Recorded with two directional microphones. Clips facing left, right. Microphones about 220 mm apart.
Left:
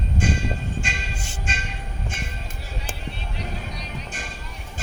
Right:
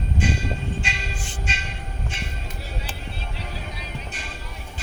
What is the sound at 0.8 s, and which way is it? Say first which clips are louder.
Music: even; 50° left (ahead or behind).